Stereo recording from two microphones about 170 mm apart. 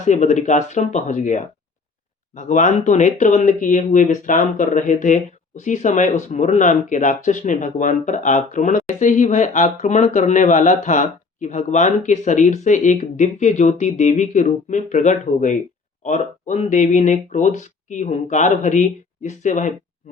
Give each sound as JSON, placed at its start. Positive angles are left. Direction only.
{"t": 0.0, "sound": "speech", "side_deg": 45}